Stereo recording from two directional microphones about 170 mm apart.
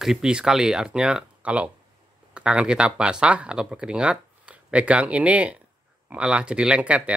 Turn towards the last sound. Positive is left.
turn(degrees=-10)  # may be behind; listen again after turning